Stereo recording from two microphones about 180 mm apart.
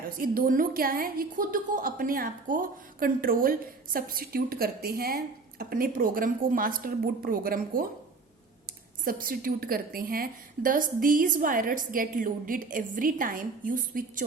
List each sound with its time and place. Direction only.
0.2 s a woman's voice: 50° right (ahead or behind)
9.0 s a woman's voice: 50° right (ahead or behind)